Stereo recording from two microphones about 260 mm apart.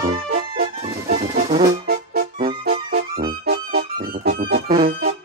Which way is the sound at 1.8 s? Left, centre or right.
Right.